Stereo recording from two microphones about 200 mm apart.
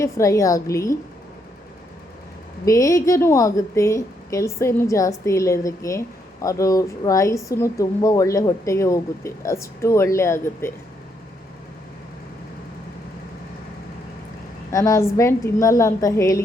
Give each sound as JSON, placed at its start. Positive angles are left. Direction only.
{"t": 0.0, "sound": "a woman's voice", "side_deg": 15}
{"t": 2.6, "sound": "a woman's voice", "side_deg": 15}
{"t": 14.7, "sound": "a woman's voice", "side_deg": 15}